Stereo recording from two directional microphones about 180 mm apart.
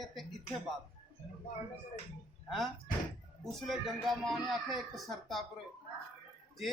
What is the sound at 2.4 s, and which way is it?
Speech, centre (ahead or behind).